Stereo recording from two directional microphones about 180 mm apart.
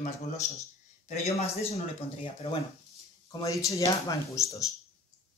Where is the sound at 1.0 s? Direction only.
35° left (ahead or behind).